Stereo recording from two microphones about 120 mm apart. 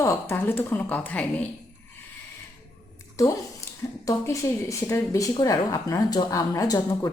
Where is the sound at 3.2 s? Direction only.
25° left (ahead or behind).